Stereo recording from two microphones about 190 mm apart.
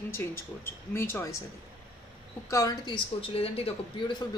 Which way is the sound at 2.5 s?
15° left (ahead or behind).